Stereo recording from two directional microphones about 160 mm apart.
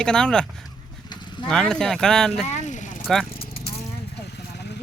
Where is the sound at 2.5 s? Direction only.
50° left (ahead or behind).